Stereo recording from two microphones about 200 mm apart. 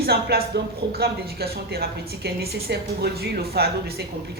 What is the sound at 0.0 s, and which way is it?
Speech, 50° right (ahead or behind).